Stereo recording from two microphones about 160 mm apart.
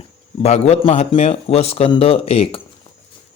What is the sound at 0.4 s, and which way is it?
Speech, 45° left (ahead or behind).